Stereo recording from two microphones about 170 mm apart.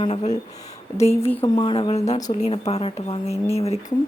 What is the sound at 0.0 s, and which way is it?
Speech, 40° left (ahead or behind).